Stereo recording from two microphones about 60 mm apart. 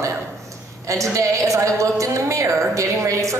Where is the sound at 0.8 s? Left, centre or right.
Right.